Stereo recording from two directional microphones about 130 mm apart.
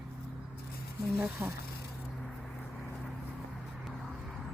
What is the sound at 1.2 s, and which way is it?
Speech, 15° right (ahead or behind).